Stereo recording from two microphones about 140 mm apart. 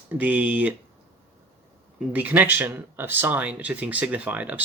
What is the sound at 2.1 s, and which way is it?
Speech, 10° right (ahead or behind).